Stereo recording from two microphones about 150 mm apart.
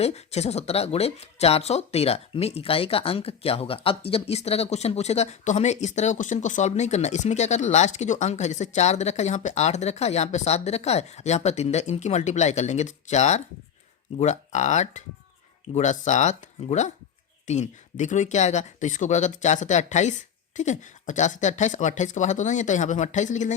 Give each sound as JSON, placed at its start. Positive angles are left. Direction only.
{"t": 0.0, "sound": "speech", "side_deg": 45}